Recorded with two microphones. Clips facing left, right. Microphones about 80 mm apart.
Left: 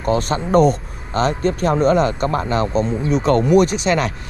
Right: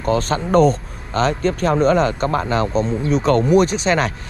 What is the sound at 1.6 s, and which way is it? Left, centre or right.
Speech, right.